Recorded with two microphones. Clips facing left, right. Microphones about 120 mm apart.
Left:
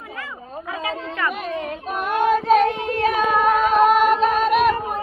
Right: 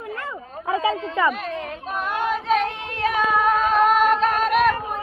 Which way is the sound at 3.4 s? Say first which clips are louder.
Left 3 dB; 10° left (ahead or behind).